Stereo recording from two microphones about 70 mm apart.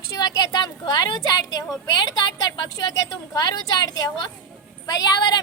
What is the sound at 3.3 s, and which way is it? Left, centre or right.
A woman's voice, left.